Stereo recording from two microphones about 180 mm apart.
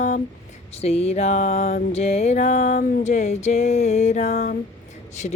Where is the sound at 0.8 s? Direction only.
35° left (ahead or behind).